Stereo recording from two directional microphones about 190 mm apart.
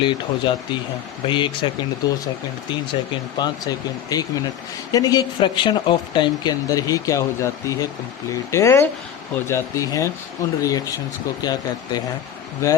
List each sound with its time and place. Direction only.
0.0 s speech: 25° left (ahead or behind)
3.3 s speech: 20° left (ahead or behind)